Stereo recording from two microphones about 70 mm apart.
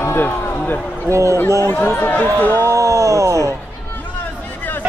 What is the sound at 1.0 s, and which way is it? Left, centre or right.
Speech, right.